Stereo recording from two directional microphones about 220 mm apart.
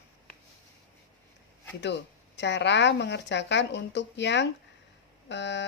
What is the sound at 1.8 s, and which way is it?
A woman's voice, 55° left (ahead or behind).